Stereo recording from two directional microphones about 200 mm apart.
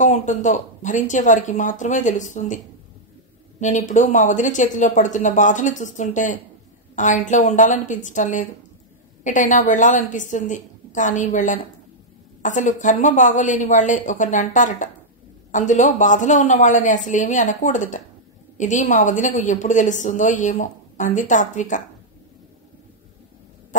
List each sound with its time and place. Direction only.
0.0 s a woman's voice: 35° left (ahead or behind)